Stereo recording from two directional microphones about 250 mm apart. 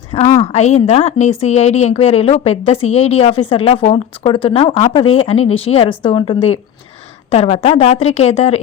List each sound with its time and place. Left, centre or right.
0.1 s a woman's voice: left